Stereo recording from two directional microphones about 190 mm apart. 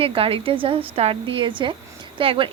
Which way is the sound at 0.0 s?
30° right (ahead or behind).